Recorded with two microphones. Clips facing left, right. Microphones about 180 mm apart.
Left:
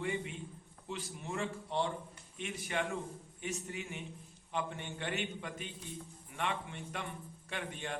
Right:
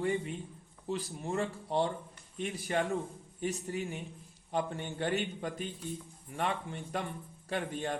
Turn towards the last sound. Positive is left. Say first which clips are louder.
# right 6 dB
turn(degrees=-40)  # may be behind; listen again after turning